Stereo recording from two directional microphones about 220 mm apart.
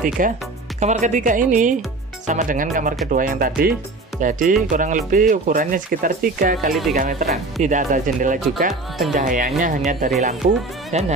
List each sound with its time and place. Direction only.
0.2 s speech: 40° right (ahead or behind)
6.7 s speech: centre (ahead or behind)
7.0 s speech: 40° right (ahead or behind)